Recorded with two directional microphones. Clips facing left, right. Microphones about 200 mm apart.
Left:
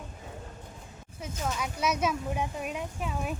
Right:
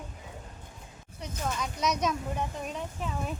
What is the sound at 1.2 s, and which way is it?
Speech, 5° left (ahead or behind).